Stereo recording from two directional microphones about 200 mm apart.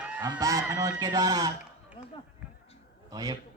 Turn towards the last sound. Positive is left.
turn(degrees=-20)  # may be behind; listen again after turning